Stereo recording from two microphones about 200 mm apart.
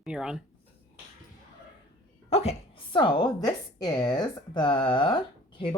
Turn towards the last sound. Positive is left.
turn(degrees=25)  # may be behind; listen again after turning